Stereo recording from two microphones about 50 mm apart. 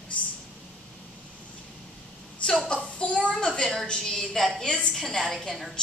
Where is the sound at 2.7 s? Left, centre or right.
Centre.